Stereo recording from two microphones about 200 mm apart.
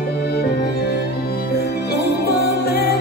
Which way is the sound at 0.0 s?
50° left (ahead or behind).